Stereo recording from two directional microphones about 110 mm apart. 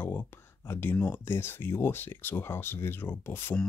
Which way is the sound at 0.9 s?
20° left (ahead or behind).